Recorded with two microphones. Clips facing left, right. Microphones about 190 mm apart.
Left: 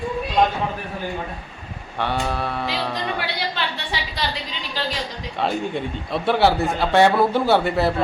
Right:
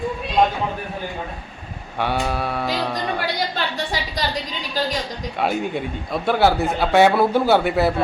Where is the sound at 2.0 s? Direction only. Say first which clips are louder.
Right 1 dB; 10° right (ahead or behind).